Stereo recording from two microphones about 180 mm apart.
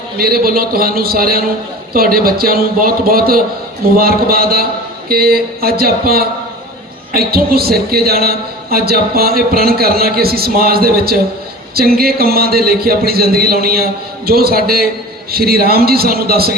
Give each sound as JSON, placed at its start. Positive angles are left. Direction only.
{"t": 0.2, "sound": "a man's voice", "side_deg": -55}